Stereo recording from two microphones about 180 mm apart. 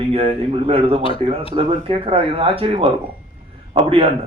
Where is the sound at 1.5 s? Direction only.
30° right (ahead or behind).